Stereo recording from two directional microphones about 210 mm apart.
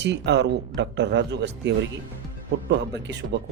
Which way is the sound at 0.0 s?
55° right (ahead or behind).